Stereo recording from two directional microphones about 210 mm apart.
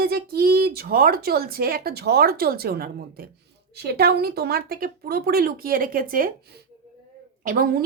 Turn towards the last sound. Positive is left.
turn(degrees=-40)  # may be behind; listen again after turning